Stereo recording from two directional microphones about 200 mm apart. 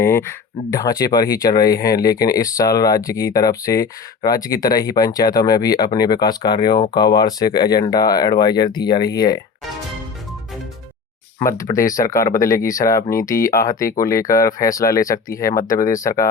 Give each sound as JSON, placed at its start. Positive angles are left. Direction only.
{"t": 0.0, "sound": "speech", "side_deg": 10}
{"t": 1.1, "sound": "speech", "side_deg": 45}
{"t": 1.5, "sound": "speech", "side_deg": 20}
{"t": 11.3, "sound": "speech", "side_deg": 15}